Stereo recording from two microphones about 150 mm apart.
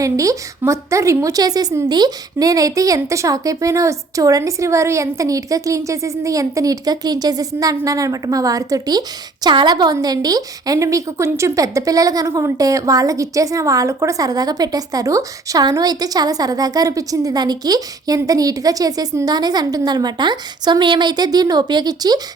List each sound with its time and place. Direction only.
0.0 s a woman's voice: 20° right (ahead or behind)